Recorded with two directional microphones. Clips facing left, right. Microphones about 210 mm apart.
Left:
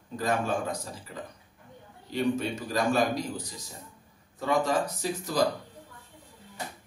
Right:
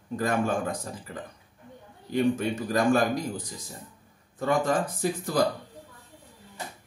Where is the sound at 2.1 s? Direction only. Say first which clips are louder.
Right 3 dB; 50° right (ahead or behind).